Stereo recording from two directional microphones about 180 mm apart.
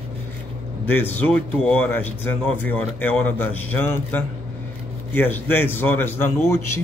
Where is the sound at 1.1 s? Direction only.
10° left (ahead or behind).